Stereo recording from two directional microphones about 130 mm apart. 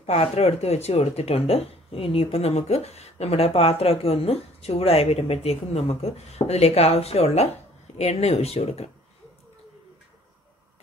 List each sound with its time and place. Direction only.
0.0 s speech: 50° left (ahead or behind)